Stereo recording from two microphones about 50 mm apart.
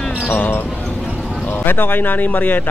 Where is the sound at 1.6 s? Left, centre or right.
Left.